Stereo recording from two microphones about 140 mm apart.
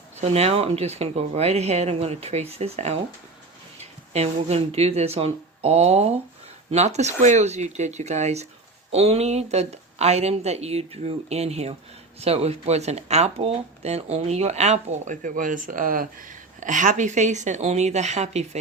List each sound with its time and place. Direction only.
0.2 s a woman's voice: 50° right (ahead or behind); by 16.0 s 80° right
16.6 s a woman's voice: 65° right (ahead or behind)